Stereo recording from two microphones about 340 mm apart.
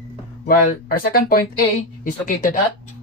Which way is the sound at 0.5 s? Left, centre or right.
Left.